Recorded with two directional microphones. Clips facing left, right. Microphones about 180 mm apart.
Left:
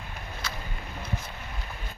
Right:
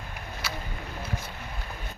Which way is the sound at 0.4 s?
10° right (ahead or behind).